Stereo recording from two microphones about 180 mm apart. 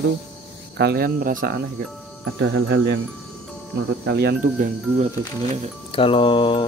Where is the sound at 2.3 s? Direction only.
80° right.